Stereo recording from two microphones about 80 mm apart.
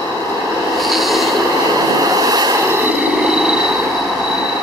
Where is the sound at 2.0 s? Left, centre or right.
Right.